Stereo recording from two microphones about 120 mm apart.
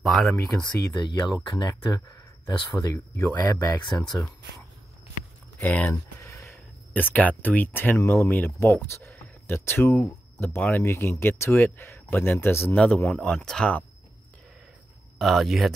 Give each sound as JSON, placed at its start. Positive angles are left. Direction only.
{"t": 0.0, "sound": "speech", "side_deg": 0}
{"t": 1.0, "sound": "speech", "side_deg": 35}
{"t": 5.6, "sound": "speech", "side_deg": 10}
{"t": 6.2, "sound": "a sound", "side_deg": 25}
{"t": 6.5, "sound": "speech", "side_deg": 15}
{"t": 15.1, "sound": "speech", "side_deg": 0}